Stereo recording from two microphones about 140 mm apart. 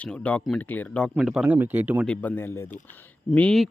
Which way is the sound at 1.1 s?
5° right (ahead or behind).